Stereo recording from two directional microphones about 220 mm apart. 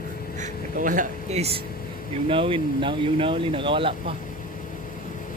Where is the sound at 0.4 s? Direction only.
35° right (ahead or behind).